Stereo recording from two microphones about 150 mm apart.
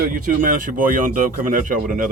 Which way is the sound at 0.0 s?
65° right (ahead or behind).